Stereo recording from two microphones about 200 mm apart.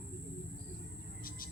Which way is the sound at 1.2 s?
45° left (ahead or behind).